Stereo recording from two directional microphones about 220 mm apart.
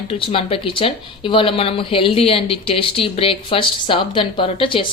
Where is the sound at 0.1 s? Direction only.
25° left (ahead or behind).